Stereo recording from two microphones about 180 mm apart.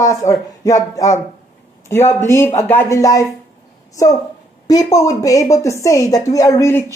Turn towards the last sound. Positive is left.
turn(degrees=15)  # may be behind; listen again after turning